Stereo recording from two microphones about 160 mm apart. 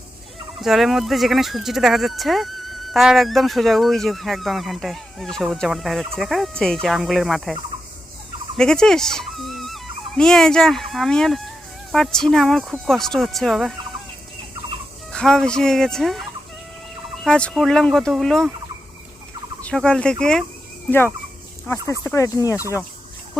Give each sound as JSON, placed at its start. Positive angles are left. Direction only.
{"t": 0.6, "sound": "speech", "side_deg": 0}
{"t": 8.5, "sound": "speech", "side_deg": 5}
{"t": 15.1, "sound": "speech", "side_deg": 5}
{"t": 17.2, "sound": "speech", "side_deg": 5}
{"t": 19.6, "sound": "speech", "side_deg": 5}
{"t": 22.0, "sound": "speech", "side_deg": 20}